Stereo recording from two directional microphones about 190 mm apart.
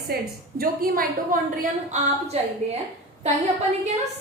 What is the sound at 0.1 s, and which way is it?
A woman's voice, 55° right (ahead or behind).